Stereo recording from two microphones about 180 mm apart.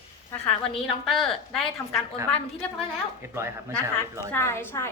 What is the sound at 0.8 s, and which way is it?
A woman's voice, centre (ahead or behind).